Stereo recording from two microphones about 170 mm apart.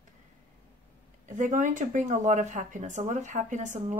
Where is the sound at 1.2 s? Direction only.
45° right (ahead or behind).